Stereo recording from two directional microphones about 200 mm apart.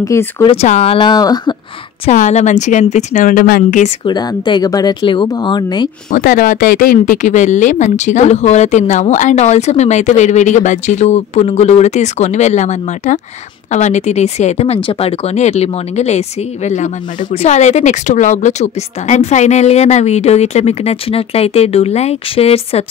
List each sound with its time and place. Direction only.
0.0 s speech: 15° left (ahead or behind)
0.5 s speech: 30° left (ahead or behind)
2.0 s speech: 35° left (ahead or behind)
3.8 s speech: 20° left (ahead or behind)
6.1 s speech: 45° left (ahead or behind); by 22.8 s 30° left (ahead or behind)